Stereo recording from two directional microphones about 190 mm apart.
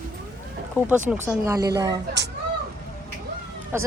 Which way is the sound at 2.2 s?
65° right (ahead or behind).